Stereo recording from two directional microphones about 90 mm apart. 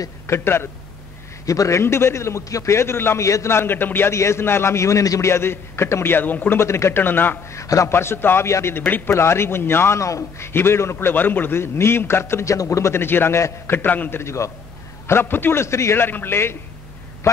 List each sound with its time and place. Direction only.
0.3 s a man's voice: 25° left (ahead or behind)
1.4 s a man's voice: 40° left (ahead or behind); by 7.3 s 20° left (ahead or behind)
7.4 s a man's voice: 35° left (ahead or behind); by 14.2 s 20° left (ahead or behind)
14.2 s a man's voice: 35° left (ahead or behind)